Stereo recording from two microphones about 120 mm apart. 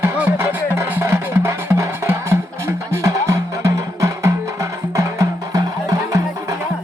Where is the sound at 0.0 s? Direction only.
20° right (ahead or behind).